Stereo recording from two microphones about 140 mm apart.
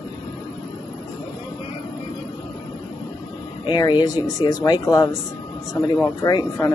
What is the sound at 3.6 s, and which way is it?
Speech, 30° left (ahead or behind).